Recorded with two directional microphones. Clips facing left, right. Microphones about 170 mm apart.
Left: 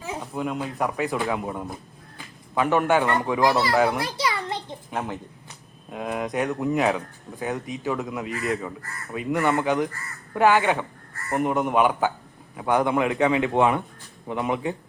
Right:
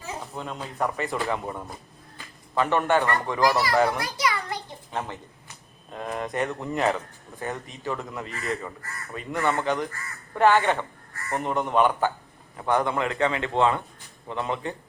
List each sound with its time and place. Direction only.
0.0 s a man's voice: 10° left (ahead or behind)
3.4 s a child's voice: 25° left (ahead or behind)
3.9 s a sound: 30° left (ahead or behind)
4.9 s a man's voice: 5° left (ahead or behind)